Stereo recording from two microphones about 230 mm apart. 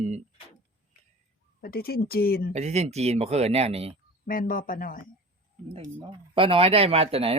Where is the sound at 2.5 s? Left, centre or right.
Right.